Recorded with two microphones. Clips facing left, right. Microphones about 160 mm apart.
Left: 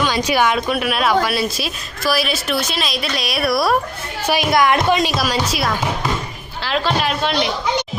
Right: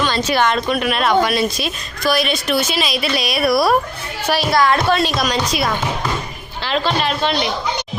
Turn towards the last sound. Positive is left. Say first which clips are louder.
# even
turn(degrees=0)  # may be behind; listen again after turning